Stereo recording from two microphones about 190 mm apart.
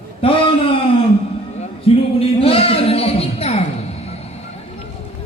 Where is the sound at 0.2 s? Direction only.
30° left (ahead or behind).